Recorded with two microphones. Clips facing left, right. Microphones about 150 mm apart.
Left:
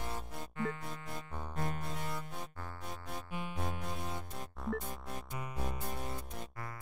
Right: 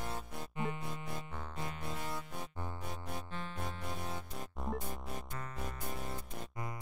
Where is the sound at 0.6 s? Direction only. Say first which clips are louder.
Left 1 dB; 20° right (ahead or behind).